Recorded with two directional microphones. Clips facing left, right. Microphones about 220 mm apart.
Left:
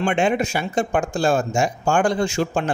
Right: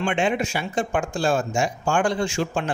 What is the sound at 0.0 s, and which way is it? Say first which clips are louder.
Speech: left 3 dB; 45° left (ahead or behind).